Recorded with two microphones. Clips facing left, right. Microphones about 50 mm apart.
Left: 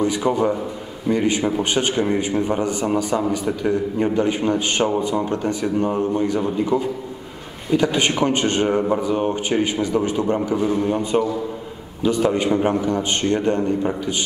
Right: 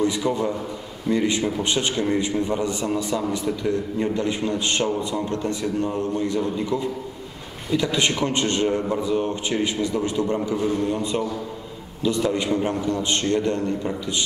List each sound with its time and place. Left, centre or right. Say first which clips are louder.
0.0 s a man's voice: left 3 dB; left
12.8 s a man's voice: left 2 dB; left